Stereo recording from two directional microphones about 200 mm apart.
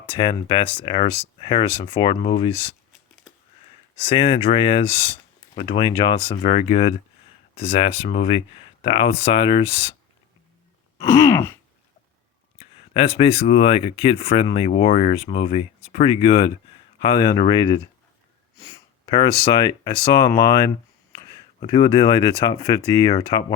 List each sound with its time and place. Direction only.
0.2 s speech: 25° left (ahead or behind)
4.1 s speech: 25° left (ahead or behind)
10.9 s a sound: 15° left (ahead or behind)
12.5 s speech: 30° left (ahead or behind)